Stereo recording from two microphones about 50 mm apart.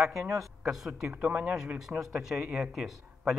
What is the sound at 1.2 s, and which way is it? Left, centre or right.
Speech, right.